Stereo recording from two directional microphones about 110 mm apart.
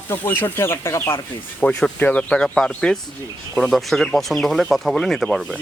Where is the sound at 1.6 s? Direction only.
10° left (ahead or behind).